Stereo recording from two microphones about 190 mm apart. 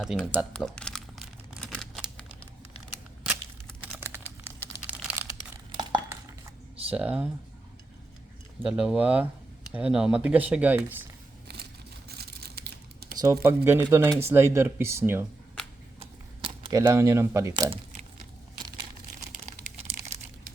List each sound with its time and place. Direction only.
0.0 s speech: centre (ahead or behind)
0.5 s crumpling: 5° left (ahead or behind)
4.0 s computer keyboard: 10° right (ahead or behind)
4.9 s a sound: 5° right (ahead or behind)
5.7 s a sound: 25° right (ahead or behind)
6.9 s speech: 10° right (ahead or behind)
8.6 s speech: 5° right (ahead or behind)
11.4 s a sound: 60° right (ahead or behind)
13.1 s speech: 15° right (ahead or behind)
16.0 s camera: 25° right (ahead or behind)
19.1 s crumpling: 50° right (ahead or behind)